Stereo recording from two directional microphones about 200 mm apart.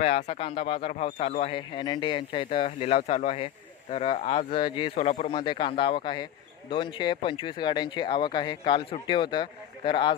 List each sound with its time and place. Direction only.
0.0 s a man's voice: 30° left (ahead or behind)